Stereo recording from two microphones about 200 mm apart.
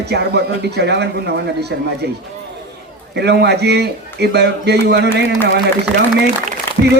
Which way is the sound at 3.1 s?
55° right (ahead or behind).